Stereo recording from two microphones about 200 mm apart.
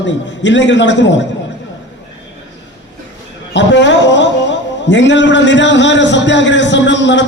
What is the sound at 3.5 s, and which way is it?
A man's voice, 60° left (ahead or behind).